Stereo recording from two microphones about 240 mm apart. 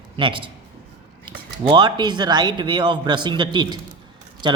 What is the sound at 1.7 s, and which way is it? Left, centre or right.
A man's voice, centre.